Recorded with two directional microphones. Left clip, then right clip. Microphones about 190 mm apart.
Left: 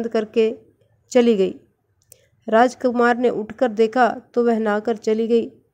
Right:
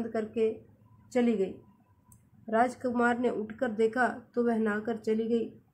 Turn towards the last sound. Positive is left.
turn(degrees=40)  # may be behind; listen again after turning